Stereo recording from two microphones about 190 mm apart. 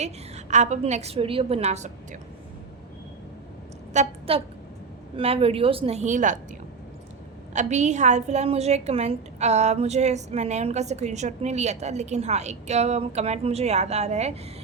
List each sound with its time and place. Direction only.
0.0 s a woman's voice: 35° right (ahead or behind)
3.9 s a woman's voice: 30° right (ahead or behind)
7.5 s a woman's voice: 40° right (ahead or behind)